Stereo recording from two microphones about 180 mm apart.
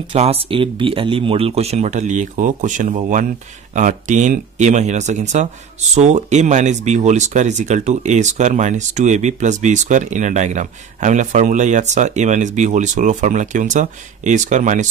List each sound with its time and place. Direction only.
0.1 s speech: 30° right (ahead or behind)